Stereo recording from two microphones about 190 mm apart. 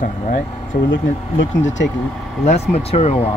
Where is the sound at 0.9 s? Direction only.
80° left.